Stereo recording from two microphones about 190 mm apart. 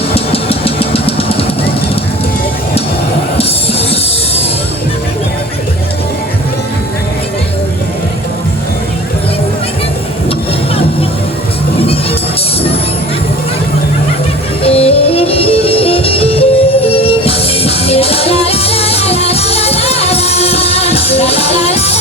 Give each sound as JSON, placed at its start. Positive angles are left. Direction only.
{"t": 0.1, "sound": "drum", "side_deg": 30}
{"t": 14.6, "sound": "music", "side_deg": 30}